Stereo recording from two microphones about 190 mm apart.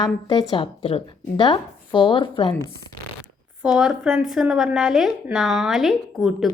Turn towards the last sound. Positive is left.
turn(degrees=0)  # may be behind; listen again after turning